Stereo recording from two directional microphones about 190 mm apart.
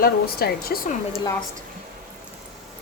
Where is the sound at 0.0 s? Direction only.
55° left (ahead or behind).